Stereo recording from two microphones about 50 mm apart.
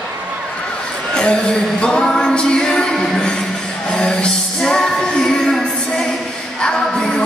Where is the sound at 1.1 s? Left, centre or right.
Centre.